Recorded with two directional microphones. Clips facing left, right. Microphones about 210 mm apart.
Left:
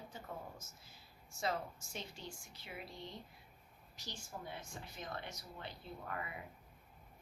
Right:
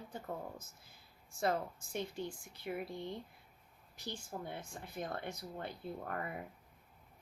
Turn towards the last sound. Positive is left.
turn(degrees=-50)  # may be behind; listen again after turning